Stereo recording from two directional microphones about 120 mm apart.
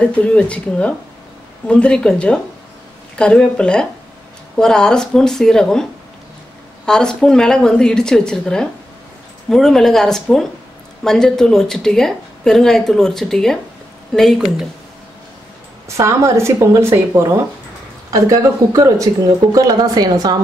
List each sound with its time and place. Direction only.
0.0 s speech: 10° left (ahead or behind)
6.9 s speech: 5° left (ahead or behind)
16.0 s speech: 25° right (ahead or behind)